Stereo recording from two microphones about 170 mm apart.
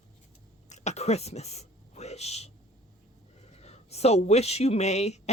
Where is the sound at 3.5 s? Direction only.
40° left (ahead or behind).